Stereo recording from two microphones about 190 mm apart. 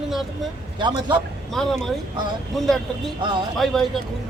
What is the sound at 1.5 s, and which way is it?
Speech, centre (ahead or behind).